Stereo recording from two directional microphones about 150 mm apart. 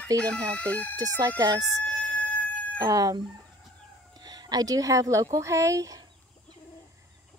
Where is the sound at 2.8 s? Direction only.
25° right (ahead or behind).